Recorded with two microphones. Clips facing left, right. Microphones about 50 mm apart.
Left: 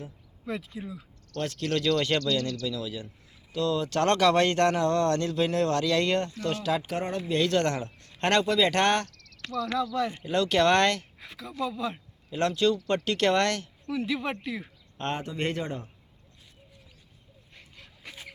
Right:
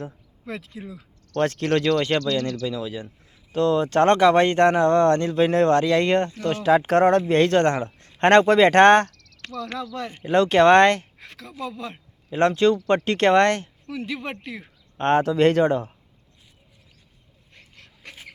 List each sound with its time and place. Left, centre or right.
0.0 s speech: right
1.4 s speech: right
1.9 s speech: right
2.6 s speech: right
6.8 s speech: right
7.3 s speech: right
11.2 s speech: right
12.3 s speech: right
13.9 s speech: right
15.1 s speech: right
17.5 s dog: right